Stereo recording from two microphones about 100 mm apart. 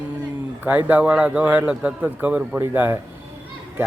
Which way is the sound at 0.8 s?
15° right (ahead or behind).